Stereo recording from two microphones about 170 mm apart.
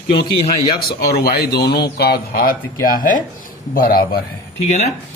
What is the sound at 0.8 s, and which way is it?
Speech, 65° left (ahead or behind).